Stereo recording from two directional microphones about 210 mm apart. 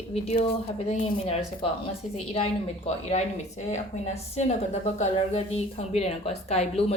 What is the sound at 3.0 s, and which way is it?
A woman's voice, 30° left (ahead or behind).